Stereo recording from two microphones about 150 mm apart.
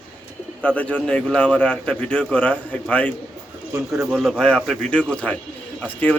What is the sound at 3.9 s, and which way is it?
Speech, 5° right (ahead or behind).